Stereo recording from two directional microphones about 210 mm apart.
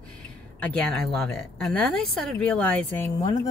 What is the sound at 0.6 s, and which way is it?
Speech, 5° left (ahead or behind).